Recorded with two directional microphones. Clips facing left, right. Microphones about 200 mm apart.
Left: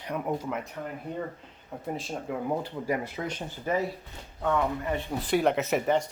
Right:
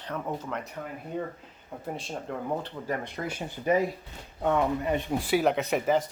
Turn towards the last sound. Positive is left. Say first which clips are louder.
# even
turn(degrees=0)  # may be behind; listen again after turning